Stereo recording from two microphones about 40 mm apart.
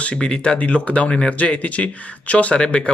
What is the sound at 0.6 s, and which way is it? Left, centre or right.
Speech, left.